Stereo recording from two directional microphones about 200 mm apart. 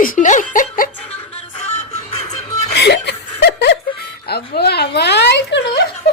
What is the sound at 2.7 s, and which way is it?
Chuckle, 55° left (ahead or behind).